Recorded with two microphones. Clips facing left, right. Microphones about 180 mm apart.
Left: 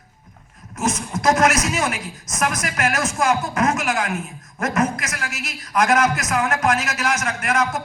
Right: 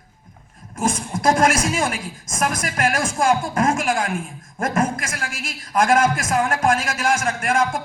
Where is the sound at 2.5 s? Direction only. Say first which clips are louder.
Right 1 dB; 50° right (ahead or behind).